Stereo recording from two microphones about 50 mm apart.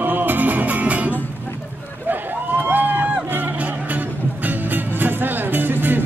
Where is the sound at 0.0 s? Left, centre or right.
Right.